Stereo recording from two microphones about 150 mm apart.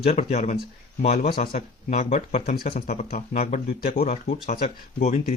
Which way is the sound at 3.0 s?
65° left (ahead or behind).